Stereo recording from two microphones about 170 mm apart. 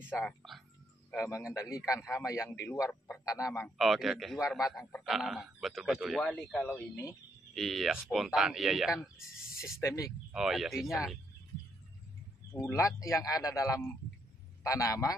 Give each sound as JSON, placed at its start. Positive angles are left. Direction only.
{"t": 0.0, "sound": "speech", "side_deg": 10}
{"t": 3.7, "sound": "speech", "side_deg": 0}
{"t": 9.8, "sound": "speech", "side_deg": 20}
{"t": 10.3, "sound": "speech", "side_deg": 0}
{"t": 12.5, "sound": "speech", "side_deg": 15}